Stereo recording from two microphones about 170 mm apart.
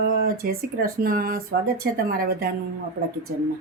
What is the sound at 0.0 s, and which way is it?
Speech, 65° right (ahead or behind).